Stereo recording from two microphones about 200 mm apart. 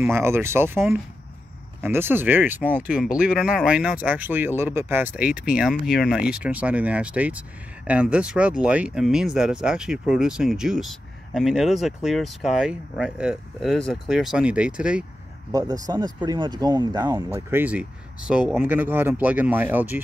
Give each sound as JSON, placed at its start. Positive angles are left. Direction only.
{"t": 0.0, "sound": "speech", "side_deg": -10}
{"t": 15.5, "sound": "speech", "side_deg": -20}